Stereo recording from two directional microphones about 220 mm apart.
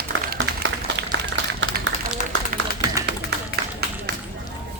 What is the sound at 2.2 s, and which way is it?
Run, 35° left (ahead or behind).